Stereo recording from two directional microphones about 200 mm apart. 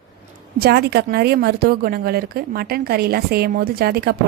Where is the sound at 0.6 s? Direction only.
55° right (ahead or behind).